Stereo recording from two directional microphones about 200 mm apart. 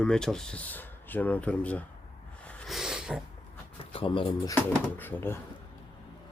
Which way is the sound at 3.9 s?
25° left (ahead or behind).